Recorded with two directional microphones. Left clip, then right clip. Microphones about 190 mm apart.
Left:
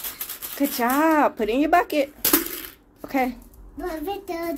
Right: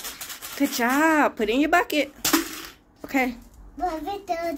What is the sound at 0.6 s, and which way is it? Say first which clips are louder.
Speech: even; centre (ahead or behind).